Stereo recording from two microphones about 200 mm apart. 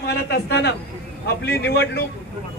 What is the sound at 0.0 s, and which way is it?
A man's voice, 55° left (ahead or behind).